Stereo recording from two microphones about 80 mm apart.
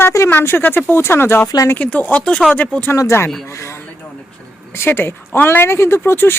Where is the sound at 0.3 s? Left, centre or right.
Left.